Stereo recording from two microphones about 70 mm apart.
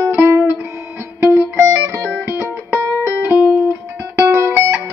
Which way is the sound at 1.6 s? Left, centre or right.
Right.